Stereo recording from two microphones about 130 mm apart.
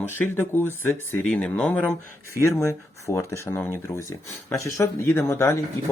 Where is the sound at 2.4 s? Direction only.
25° left (ahead or behind).